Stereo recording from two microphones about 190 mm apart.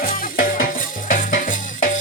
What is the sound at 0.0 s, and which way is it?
Music, 45° left (ahead or behind).